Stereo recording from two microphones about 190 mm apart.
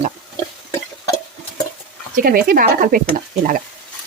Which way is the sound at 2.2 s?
50° right (ahead or behind).